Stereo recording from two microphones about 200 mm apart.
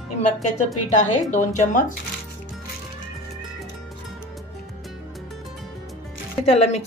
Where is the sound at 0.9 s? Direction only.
40° left (ahead or behind).